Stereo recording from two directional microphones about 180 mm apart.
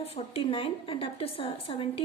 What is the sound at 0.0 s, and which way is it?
A woman's voice, 35° left (ahead or behind).